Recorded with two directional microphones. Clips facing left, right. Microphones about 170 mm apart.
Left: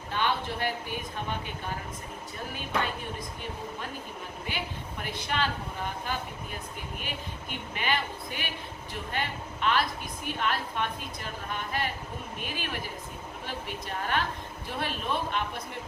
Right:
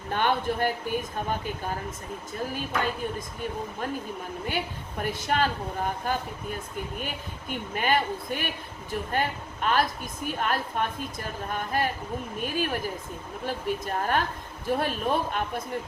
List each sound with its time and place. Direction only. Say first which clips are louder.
0.1 s speech: right 4 dB; 50° right (ahead or behind)
4.4 s a woman's voice: right 4 dB; 45° right (ahead or behind)
7.5 s a woman's voice: right 6 dB; 45° right (ahead or behind)